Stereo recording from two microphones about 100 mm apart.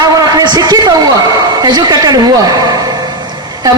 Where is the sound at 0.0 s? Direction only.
40° right (ahead or behind).